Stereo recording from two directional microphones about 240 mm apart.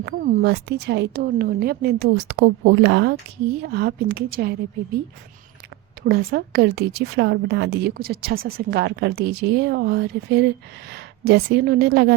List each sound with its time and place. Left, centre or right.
0.0 s a woman's voice: right
6.0 s a woman's voice: right